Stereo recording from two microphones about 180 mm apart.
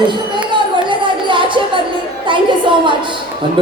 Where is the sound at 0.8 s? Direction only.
25° right (ahead or behind).